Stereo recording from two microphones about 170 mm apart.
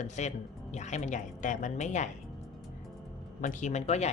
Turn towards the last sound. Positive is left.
turn(degrees=40)  # may be behind; listen again after turning